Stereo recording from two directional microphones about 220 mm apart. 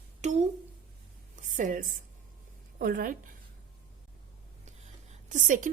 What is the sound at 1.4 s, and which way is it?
Speech, 35° right (ahead or behind).